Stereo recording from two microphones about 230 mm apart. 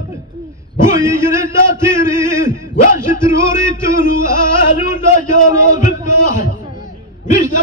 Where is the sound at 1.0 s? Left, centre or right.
Centre.